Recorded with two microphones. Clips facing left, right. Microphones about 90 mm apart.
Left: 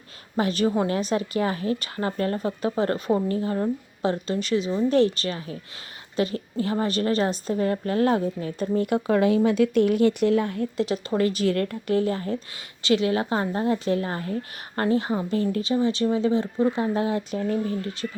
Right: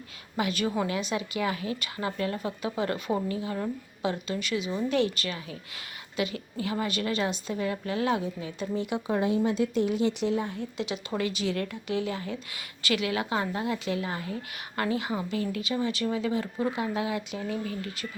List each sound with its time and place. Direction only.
0.3 s a woman's voice: 35° left (ahead or behind)
12.8 s speech: 30° left (ahead or behind)